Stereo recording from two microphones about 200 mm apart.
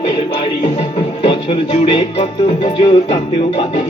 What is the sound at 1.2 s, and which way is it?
Music, 25° left (ahead or behind).